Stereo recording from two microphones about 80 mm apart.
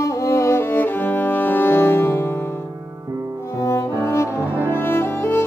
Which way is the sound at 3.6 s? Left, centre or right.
Left.